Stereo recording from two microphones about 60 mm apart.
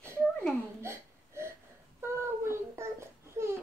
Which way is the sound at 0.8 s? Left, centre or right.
Right.